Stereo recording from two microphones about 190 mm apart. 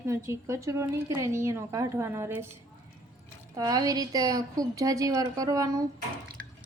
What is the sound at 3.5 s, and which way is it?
A woman's voice, 20° right (ahead or behind).